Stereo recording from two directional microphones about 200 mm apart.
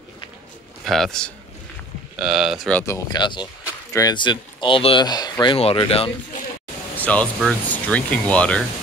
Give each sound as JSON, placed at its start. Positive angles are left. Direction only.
{"t": 0.8, "sound": "speech", "side_deg": 0}
{"t": 2.9, "sound": "speech", "side_deg": 20}
{"t": 7.0, "sound": "speech", "side_deg": 5}